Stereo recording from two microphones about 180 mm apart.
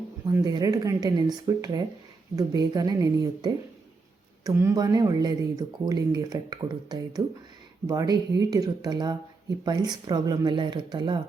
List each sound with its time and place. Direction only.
0.3 s speech: 20° right (ahead or behind)